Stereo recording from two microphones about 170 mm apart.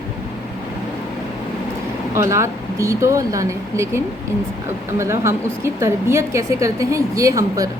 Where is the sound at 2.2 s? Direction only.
15° right (ahead or behind).